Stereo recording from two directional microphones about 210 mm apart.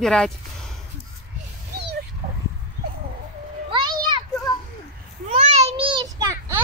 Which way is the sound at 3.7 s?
20° right (ahead or behind).